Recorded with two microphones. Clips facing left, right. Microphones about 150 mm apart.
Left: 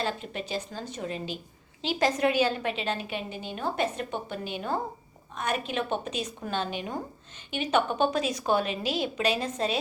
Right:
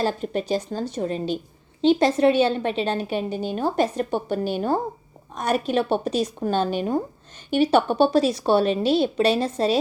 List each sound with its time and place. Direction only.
0.0 s a woman's voice: 40° right (ahead or behind)